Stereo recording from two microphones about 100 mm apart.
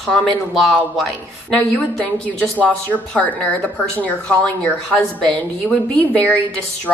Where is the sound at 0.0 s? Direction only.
5° left (ahead or behind).